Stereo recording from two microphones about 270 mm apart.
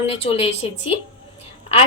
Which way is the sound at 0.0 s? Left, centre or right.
Left.